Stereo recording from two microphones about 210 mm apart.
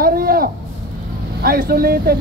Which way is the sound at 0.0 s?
45° right (ahead or behind).